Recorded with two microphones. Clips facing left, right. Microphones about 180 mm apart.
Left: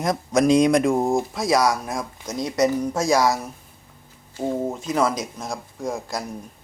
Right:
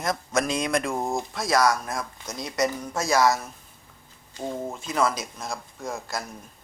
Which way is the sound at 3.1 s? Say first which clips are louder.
Left 1 dB; centre (ahead or behind).